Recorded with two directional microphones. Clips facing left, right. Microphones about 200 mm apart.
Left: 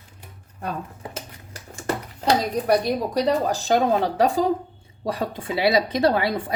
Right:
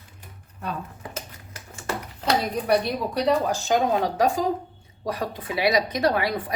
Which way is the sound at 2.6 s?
40° left (ahead or behind).